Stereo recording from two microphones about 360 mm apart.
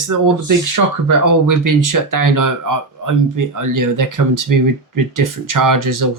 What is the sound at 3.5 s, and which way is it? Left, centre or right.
Speech, right.